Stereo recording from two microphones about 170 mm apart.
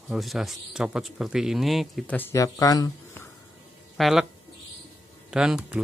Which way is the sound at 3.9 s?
Centre (ahead or behind).